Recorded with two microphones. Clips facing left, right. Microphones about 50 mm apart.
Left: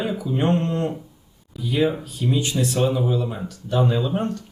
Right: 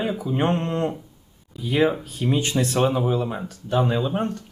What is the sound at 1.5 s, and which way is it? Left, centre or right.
Speech, right.